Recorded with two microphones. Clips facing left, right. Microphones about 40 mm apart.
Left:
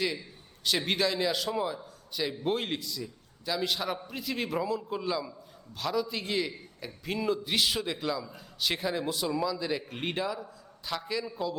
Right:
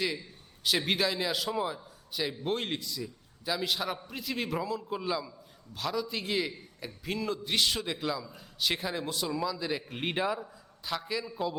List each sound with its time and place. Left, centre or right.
0.6 s a man's voice: centre
10.2 s a man's voice: right
10.4 s a man's voice: centre